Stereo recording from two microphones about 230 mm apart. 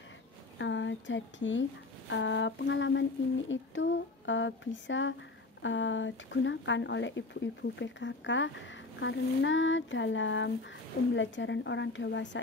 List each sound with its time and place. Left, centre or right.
0.6 s speech: left